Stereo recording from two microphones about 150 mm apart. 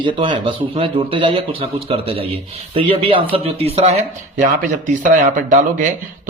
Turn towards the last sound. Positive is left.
turn(degrees=-55)  # may be behind; listen again after turning